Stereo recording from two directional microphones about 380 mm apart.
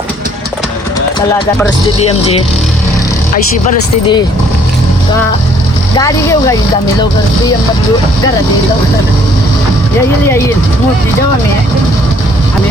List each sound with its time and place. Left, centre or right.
3.3 s speech: centre